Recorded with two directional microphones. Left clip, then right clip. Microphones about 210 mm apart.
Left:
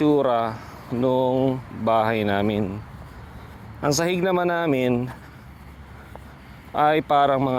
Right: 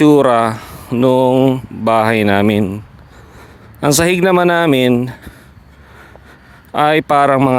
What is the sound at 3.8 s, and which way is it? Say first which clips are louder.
Speech: right 9 dB; 50° right (ahead or behind).